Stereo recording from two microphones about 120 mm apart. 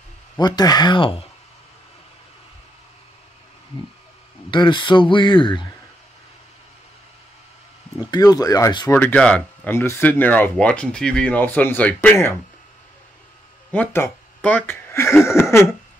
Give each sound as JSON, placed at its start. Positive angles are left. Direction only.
{"t": 0.4, "sound": "speech", "side_deg": 35}
{"t": 4.5, "sound": "speech", "side_deg": 40}
{"t": 8.1, "sound": "speech", "side_deg": 30}
{"t": 8.9, "sound": "speech", "side_deg": 10}
{"t": 13.7, "sound": "speech", "side_deg": 15}